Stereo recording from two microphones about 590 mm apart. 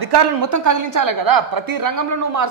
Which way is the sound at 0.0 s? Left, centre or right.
Right.